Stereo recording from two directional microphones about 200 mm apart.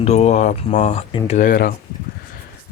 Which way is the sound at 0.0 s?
35° left (ahead or behind).